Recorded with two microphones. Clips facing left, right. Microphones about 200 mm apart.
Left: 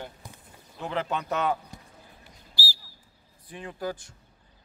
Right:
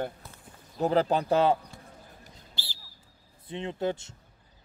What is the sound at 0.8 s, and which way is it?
Speech, 35° right (ahead or behind).